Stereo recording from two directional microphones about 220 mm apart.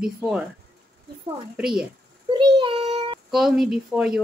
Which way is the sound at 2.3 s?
20° right (ahead or behind).